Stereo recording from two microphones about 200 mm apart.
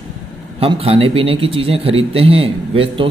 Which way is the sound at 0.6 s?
30° right (ahead or behind).